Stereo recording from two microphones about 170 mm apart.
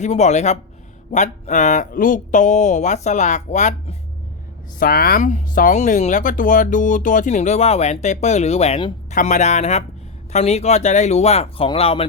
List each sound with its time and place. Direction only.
0.0 s speech: 40° left (ahead or behind)
4.8 s speech: 60° left (ahead or behind); by 12.0 s 35° left (ahead or behind)